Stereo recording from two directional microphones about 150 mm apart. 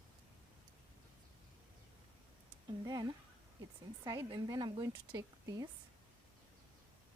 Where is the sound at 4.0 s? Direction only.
25° right (ahead or behind).